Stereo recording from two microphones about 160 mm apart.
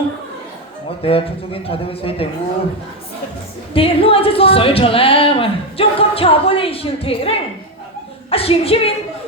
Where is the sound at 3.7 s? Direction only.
35° left (ahead or behind).